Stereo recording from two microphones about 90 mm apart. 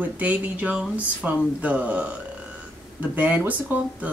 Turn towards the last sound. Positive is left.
turn(degrees=-20)  # may be behind; listen again after turning